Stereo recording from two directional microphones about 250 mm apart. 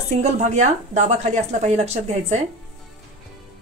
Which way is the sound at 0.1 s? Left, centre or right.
Right.